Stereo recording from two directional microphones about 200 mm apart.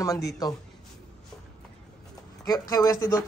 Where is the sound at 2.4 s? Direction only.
20° left (ahead or behind).